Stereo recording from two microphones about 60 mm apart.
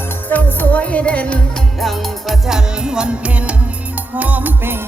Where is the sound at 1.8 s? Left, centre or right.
Centre.